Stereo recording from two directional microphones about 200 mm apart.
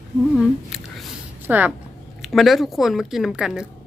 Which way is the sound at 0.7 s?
Centre (ahead or behind).